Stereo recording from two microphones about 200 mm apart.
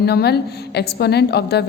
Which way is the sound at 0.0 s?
55° left (ahead or behind).